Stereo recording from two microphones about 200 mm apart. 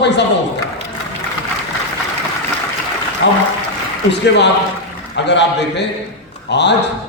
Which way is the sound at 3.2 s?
60° left (ahead or behind).